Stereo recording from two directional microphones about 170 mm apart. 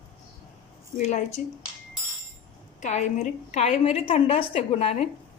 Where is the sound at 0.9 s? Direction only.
45° left (ahead or behind).